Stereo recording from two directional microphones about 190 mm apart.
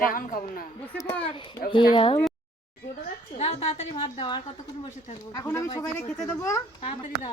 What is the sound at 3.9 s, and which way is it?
A child's voice, 25° left (ahead or behind).